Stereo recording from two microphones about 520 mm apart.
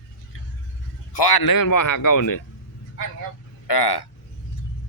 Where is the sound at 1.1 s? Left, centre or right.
Left.